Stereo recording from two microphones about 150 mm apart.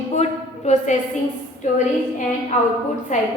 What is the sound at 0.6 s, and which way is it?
A woman's voice, 50° left (ahead or behind).